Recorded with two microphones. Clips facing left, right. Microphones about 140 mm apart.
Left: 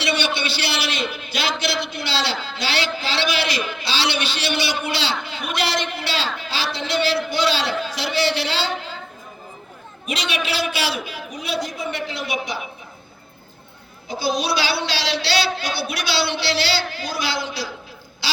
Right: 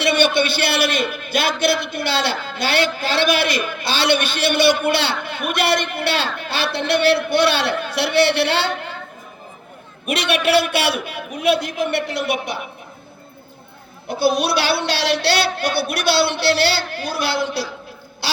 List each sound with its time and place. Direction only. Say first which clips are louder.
0.0 s a man's voice: right 6 dB; 50° right (ahead or behind)
10.1 s a woman's voice: right 8 dB; 60° right (ahead or behind)
14.1 s a woman's voice: right 5 dB; 65° right (ahead or behind)